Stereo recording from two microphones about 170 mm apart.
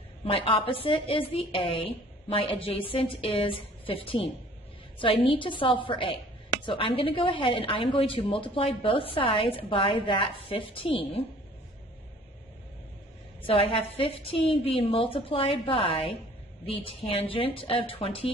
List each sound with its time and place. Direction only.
0.2 s speech: 30° left (ahead or behind)
13.5 s speech: 35° left (ahead or behind)